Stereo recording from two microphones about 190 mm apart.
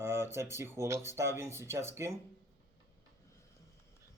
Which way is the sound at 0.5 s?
15° right (ahead or behind).